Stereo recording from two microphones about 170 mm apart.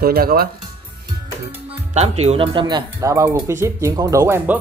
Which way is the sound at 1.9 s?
40° right (ahead or behind).